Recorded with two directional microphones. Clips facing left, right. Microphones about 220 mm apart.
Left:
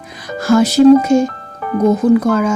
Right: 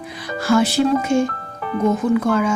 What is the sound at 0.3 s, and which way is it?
Speech, 45° left (ahead or behind).